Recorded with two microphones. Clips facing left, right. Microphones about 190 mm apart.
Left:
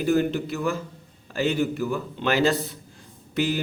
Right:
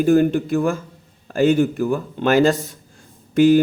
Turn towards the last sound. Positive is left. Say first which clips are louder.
# right 12 dB
turn(degrees=-50)  # may be behind; listen again after turning